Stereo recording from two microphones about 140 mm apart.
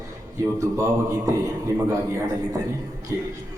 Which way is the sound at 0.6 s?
20° right (ahead or behind).